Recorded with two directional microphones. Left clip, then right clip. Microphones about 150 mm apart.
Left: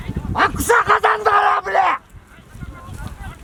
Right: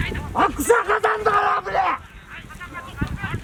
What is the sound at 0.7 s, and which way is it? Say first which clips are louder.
Speech: left 6 dB; 25° left (ahead or behind).